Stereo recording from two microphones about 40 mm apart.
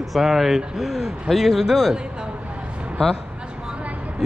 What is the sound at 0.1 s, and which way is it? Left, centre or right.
Speech, centre.